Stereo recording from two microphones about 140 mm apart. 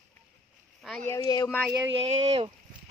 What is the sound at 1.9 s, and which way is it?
Speech, 40° right (ahead or behind).